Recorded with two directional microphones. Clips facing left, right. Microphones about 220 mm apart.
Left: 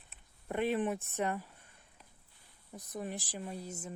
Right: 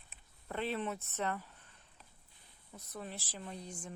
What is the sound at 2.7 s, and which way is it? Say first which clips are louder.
Speech: left 5 dB; 15° left (ahead or behind).